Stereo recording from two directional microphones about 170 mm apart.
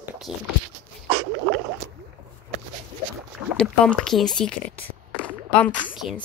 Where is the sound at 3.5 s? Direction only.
5° left (ahead or behind).